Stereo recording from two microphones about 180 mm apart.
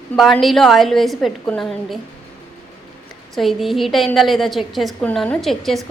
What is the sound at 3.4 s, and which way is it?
A woman's voice, centre (ahead or behind).